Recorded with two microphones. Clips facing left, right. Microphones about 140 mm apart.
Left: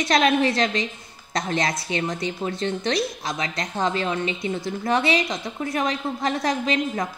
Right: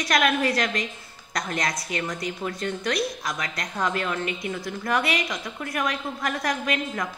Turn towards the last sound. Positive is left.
turn(degrees=25)  # may be behind; listen again after turning